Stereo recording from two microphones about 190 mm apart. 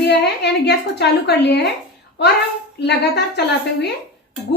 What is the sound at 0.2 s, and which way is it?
Speech, 65° left (ahead or behind).